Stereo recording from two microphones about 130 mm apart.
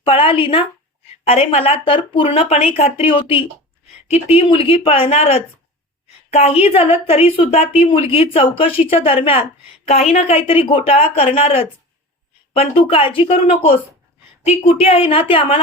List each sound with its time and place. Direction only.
0.0 s a woman's voice: 45° left (ahead or behind)